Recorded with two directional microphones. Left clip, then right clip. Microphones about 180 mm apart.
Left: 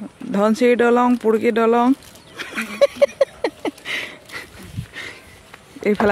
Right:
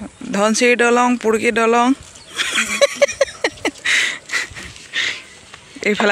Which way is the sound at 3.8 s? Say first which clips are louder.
Right 10 dB; 10° right (ahead or behind).